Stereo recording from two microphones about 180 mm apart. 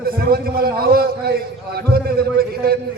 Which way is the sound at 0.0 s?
55° right (ahead or behind).